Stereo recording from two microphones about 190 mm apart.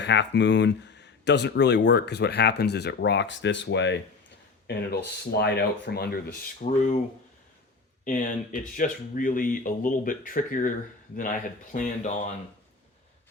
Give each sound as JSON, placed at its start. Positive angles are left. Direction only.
{"t": 0.0, "sound": "speech", "side_deg": 65}
{"t": 6.7, "sound": "speech", "side_deg": 40}
{"t": 8.0, "sound": "speech", "side_deg": 45}